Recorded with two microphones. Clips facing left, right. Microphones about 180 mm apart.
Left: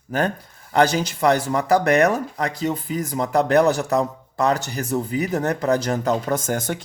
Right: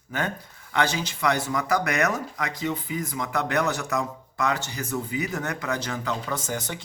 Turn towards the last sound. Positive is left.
turn(degrees=50)  # may be behind; listen again after turning